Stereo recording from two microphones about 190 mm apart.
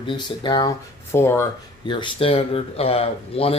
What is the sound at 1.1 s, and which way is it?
Speech, 15° left (ahead or behind).